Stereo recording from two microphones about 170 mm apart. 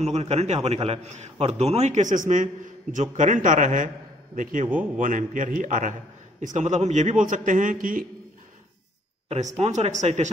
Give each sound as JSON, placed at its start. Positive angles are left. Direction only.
{"t": 0.0, "sound": "a man's voice", "side_deg": -40}
{"t": 9.6, "sound": "a man's voice", "side_deg": -45}